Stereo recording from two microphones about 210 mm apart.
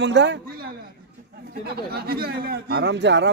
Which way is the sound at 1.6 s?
50° right (ahead or behind).